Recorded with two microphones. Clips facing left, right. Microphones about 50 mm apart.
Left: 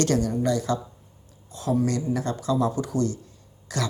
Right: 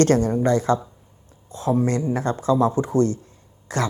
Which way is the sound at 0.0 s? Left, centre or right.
Right.